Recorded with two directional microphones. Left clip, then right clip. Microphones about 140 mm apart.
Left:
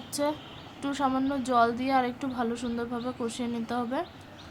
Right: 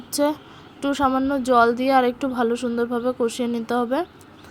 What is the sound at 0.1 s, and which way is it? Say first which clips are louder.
Speech: right 8 dB; 40° right (ahead or behind).